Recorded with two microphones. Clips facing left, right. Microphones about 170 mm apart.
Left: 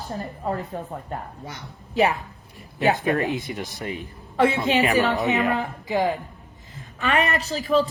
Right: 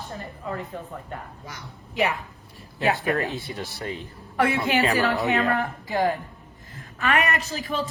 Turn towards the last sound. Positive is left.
turn(degrees=35)  # may be behind; listen again after turning